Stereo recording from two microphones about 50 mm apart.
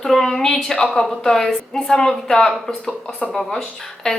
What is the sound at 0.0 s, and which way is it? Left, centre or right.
A woman's voice, centre.